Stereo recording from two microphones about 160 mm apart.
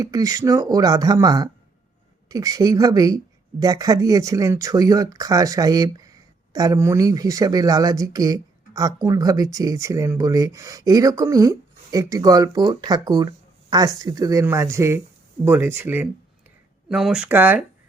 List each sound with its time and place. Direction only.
0.0 s speech: 20° right (ahead or behind)